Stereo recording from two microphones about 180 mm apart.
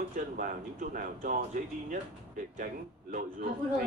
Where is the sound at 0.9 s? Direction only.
45° right (ahead or behind).